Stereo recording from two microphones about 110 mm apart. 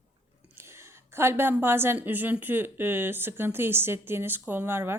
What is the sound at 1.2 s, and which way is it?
Speech, 20° right (ahead or behind).